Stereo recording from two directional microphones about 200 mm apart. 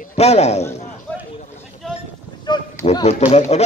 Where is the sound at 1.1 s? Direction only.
5° left (ahead or behind).